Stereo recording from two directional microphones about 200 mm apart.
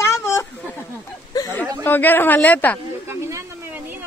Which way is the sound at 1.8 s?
10° left (ahead or behind).